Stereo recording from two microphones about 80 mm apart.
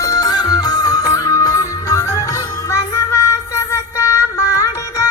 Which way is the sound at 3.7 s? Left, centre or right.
Left.